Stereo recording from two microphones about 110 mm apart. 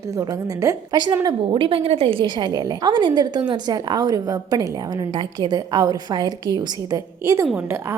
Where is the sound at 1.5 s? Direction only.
55° right (ahead or behind).